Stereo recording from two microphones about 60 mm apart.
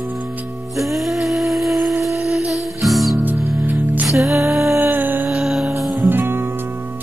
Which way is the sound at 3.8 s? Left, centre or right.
Right.